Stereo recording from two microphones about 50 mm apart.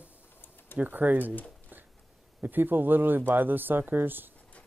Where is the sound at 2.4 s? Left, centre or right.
Right.